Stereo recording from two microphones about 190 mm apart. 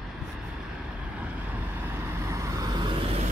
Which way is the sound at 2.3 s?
15° right (ahead or behind).